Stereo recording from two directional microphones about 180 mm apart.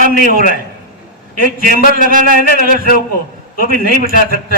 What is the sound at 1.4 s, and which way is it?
A man's voice, 50° right (ahead or behind).